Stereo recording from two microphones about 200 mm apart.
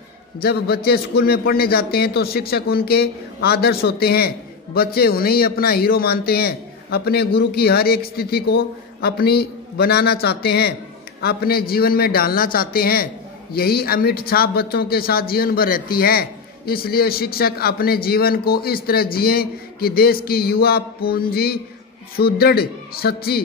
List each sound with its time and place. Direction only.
0.4 s speech: 50° left (ahead or behind)